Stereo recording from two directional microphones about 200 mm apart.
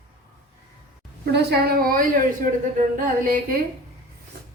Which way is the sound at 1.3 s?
50° right (ahead or behind).